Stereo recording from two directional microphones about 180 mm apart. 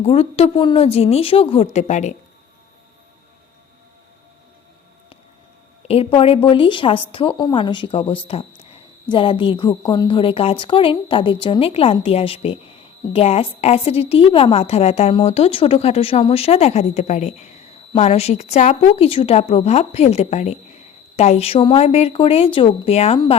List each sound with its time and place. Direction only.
0.0 s a woman's voice: 35° left (ahead or behind)
5.9 s a woman's voice: 30° left (ahead or behind)